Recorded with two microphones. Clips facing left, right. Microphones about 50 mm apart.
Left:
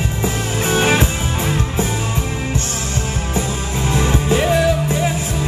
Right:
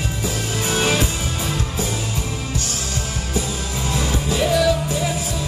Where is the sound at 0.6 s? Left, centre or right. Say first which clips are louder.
Left 4 dB; left.